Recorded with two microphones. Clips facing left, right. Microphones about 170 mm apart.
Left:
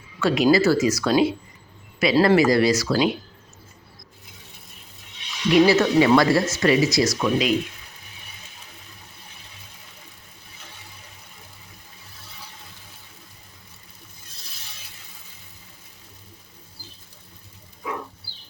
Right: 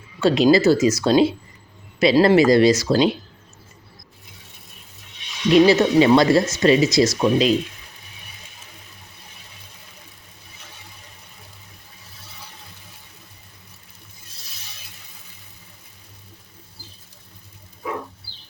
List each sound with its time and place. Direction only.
0.2 s speech: 25° right (ahead or behind)
5.5 s speech: 25° right (ahead or behind)